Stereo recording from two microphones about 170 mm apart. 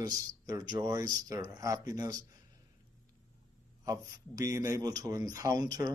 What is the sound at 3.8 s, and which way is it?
Speech, 20° right (ahead or behind).